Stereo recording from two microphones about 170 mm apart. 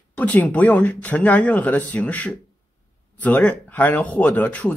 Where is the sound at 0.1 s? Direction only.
10° left (ahead or behind).